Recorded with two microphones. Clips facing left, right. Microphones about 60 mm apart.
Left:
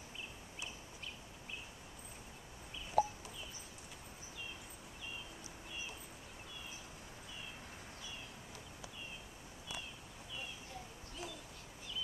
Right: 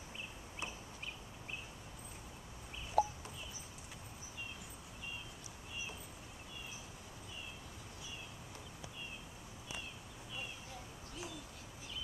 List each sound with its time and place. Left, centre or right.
3.0 s bird: centre